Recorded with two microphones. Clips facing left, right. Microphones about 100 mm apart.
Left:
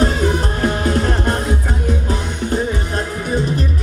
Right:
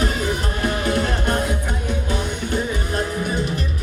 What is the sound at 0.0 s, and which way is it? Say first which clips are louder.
Music: left 6 dB; 35° left (ahead or behind).